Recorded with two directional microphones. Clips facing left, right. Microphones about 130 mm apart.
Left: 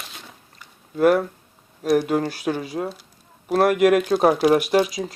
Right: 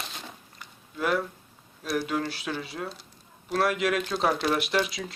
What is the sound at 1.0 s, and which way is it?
Speech, 50° left (ahead or behind).